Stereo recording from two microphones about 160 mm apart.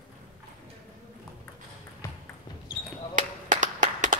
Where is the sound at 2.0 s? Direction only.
15° left (ahead or behind).